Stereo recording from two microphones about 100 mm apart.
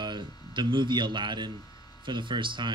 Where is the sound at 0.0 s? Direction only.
50° right (ahead or behind).